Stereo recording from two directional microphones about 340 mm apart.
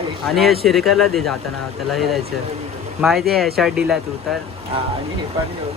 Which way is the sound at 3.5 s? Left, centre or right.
Centre.